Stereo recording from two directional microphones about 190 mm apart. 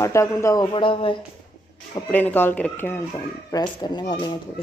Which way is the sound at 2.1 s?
10° left (ahead or behind).